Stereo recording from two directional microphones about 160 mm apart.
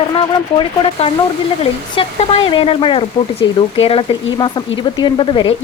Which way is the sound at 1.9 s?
35° left (ahead or behind).